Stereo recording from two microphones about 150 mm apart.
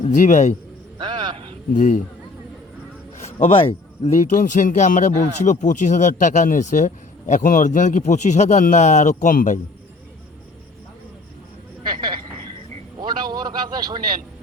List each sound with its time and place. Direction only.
0.1 s speech: 55° left (ahead or behind)
0.9 s a sound: 30° right (ahead or behind)
1.7 s speech: 55° left (ahead or behind)
3.3 s a man's voice: 40° left (ahead or behind)
4.0 s speech: 50° left (ahead or behind)
11.9 s a sound: 30° right (ahead or behind)